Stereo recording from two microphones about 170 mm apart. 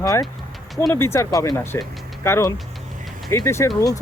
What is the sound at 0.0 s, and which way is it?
Speech, 20° left (ahead or behind).